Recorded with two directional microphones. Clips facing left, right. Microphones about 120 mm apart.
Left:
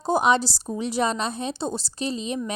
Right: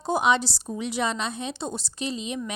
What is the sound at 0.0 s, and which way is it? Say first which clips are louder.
A woman's voice: left 2 dB; 40° left (ahead or behind).